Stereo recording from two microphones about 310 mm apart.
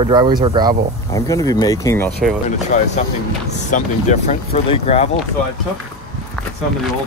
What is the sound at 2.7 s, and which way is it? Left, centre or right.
Speech, left.